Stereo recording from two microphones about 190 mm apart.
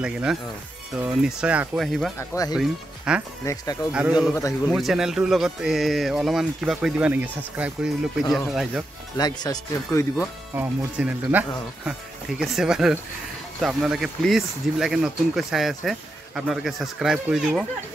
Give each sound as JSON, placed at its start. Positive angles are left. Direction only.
{"t": 0.0, "sound": "speech", "side_deg": -5}
{"t": 2.1, "sound": "speech", "side_deg": 15}
{"t": 2.5, "sound": "speech", "side_deg": -5}
{"t": 9.1, "sound": "speech", "side_deg": 20}
{"t": 10.5, "sound": "speech", "side_deg": -10}